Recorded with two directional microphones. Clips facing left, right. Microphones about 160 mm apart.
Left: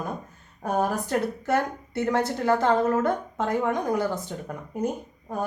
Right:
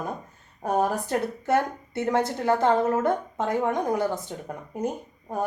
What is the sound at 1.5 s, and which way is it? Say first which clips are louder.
A woman's voice: right 4 dB; 20° right (ahead or behind).